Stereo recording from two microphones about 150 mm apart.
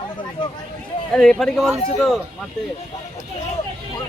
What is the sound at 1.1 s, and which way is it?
A man's voice, 5° left (ahead or behind).